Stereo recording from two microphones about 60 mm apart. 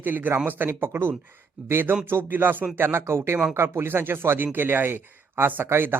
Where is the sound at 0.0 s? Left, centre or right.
Right.